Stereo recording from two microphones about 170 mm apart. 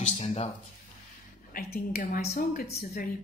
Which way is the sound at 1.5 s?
65° left (ahead or behind).